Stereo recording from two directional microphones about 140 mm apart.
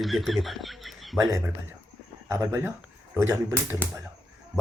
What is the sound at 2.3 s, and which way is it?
Speech, 20° right (ahead or behind).